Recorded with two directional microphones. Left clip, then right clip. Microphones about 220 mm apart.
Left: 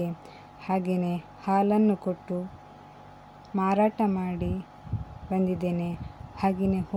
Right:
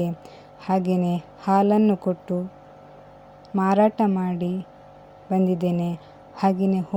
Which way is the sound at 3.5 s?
15° right (ahead or behind).